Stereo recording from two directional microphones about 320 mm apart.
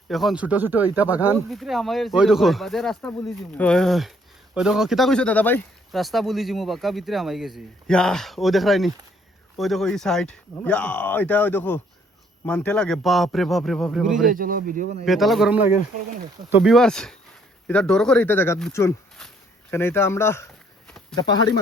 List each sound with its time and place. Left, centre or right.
0.1 s speech: centre
14.3 s speech: right
15.0 s speech: centre